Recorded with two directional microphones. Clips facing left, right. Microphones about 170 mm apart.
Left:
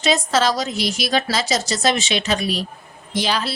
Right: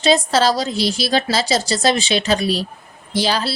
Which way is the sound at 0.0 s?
30° right (ahead or behind).